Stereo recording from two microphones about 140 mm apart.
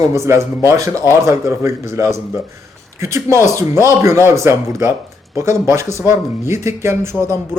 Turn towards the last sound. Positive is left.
turn(degrees=-20)  # may be behind; listen again after turning